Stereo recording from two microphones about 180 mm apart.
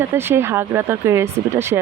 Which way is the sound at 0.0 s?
15° right (ahead or behind).